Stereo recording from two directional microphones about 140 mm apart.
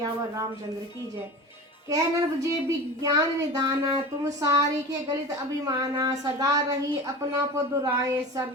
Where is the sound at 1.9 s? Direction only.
25° right (ahead or behind).